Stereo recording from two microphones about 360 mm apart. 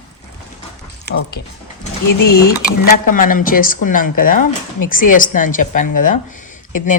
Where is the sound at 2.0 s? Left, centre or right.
Left.